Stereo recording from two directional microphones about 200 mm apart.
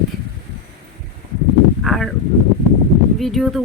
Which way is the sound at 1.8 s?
Centre (ahead or behind).